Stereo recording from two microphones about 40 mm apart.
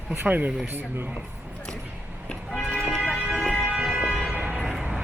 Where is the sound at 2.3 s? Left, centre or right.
Left.